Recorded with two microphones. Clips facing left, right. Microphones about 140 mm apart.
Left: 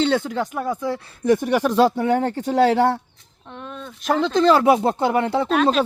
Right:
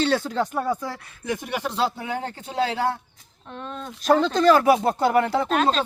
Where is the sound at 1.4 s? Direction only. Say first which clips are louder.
Left 5 dB; 55° left (ahead or behind).